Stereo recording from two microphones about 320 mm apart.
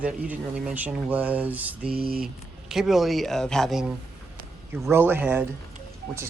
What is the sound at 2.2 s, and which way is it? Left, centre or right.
Speech, centre.